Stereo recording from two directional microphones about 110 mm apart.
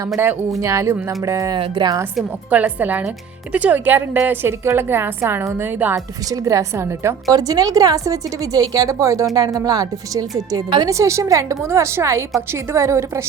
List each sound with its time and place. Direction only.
0.6 s a woman's voice: 25° right (ahead or behind)
1.5 s speech: 45° right (ahead or behind)
2.5 s a woman's voice: 15° right (ahead or behind)
6.3 s a woman's voice: 30° right (ahead or behind)